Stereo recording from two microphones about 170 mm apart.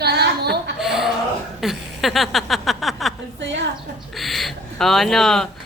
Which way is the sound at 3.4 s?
90° right.